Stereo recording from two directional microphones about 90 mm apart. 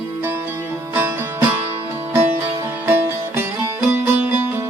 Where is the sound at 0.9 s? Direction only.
25° right (ahead or behind).